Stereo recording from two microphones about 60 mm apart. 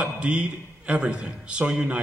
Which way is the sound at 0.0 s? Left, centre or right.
Centre.